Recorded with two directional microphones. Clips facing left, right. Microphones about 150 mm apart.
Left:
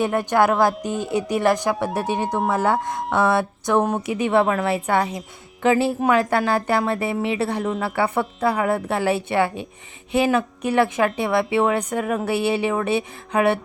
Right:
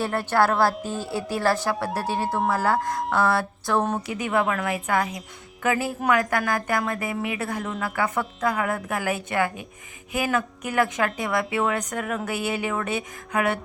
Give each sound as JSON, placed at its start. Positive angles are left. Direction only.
{"t": 0.0, "sound": "a woman's voice", "side_deg": 15}